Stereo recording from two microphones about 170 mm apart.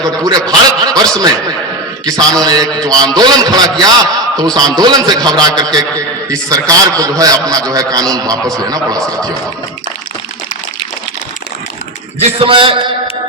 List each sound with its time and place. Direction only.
0.0 s a man's voice: 20° right (ahead or behind)
12.2 s a man's voice: 30° right (ahead or behind)